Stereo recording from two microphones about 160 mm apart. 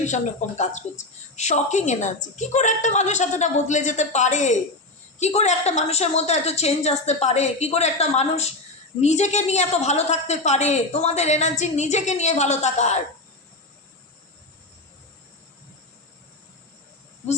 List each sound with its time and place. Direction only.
0.0 s a woman's voice: 45° left (ahead or behind)